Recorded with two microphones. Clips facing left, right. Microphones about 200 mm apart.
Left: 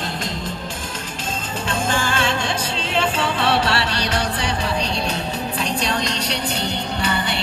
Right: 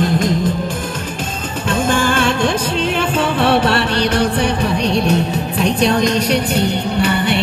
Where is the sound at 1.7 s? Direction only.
55° right (ahead or behind).